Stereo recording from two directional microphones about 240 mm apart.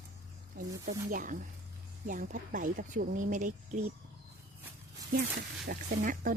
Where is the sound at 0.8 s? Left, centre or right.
Right.